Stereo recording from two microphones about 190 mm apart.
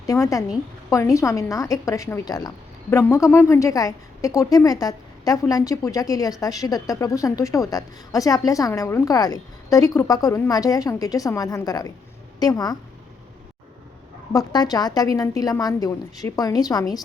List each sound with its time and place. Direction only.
0.0 s a woman's voice: 15° left (ahead or behind)
14.3 s a woman's voice: 20° left (ahead or behind)